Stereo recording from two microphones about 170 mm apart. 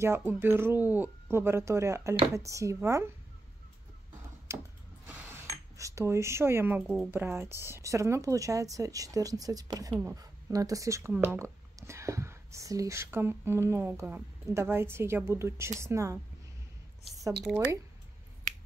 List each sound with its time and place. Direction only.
0.0 s speech: 15° right (ahead or behind)
4.5 s speech: 15° right (ahead or behind)
5.0 s a sound: 10° right (ahead or behind)
5.8 s speech: 20° right (ahead or behind)
17.5 s speech: centre (ahead or behind)